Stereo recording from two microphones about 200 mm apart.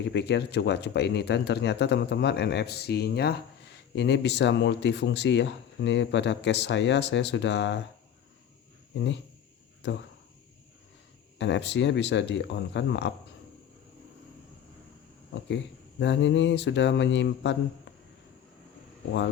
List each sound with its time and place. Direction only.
0.1 s speech: 55° left (ahead or behind)
9.0 s speech: 65° left (ahead or behind)
11.3 s speech: 60° left (ahead or behind)
16.0 s speech: 65° left (ahead or behind)